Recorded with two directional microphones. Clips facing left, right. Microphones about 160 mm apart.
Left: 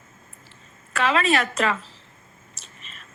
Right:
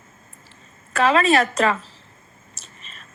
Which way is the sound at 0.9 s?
40° right (ahead or behind).